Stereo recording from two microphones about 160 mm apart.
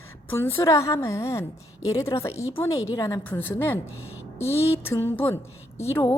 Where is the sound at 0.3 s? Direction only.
15° left (ahead or behind).